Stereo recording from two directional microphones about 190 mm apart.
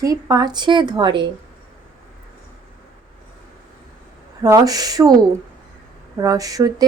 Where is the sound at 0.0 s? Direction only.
20° right (ahead or behind).